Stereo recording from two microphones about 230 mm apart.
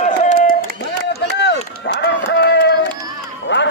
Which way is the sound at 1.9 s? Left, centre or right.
Left.